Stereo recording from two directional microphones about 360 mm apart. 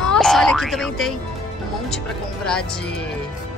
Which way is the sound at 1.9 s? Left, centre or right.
Centre.